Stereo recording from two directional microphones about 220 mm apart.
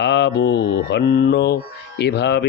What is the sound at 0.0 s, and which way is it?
Speech, 50° left (ahead or behind).